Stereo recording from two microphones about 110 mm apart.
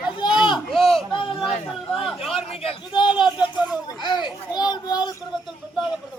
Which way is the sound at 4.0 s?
45° left (ahead or behind).